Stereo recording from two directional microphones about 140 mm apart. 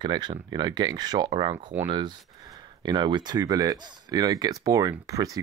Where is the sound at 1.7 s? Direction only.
15° right (ahead or behind).